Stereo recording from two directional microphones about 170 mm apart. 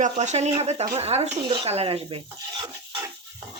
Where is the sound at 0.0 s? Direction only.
45° right (ahead or behind); by 3.0 s 30° right (ahead or behind).